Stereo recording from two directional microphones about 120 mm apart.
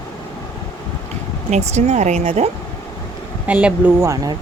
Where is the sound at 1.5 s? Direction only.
70° right (ahead or behind).